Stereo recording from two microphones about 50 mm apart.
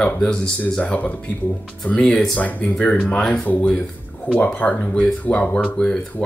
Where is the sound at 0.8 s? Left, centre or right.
Left.